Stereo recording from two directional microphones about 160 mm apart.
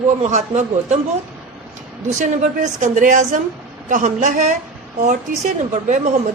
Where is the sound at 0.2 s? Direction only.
50° right (ahead or behind).